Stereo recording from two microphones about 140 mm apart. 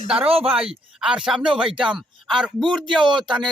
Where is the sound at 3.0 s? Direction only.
35° right (ahead or behind).